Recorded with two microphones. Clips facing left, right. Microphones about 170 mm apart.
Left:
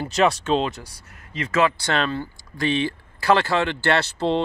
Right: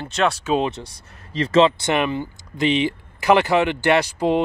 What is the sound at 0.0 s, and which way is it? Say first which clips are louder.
Speech: left 1 dB; centre (ahead or behind).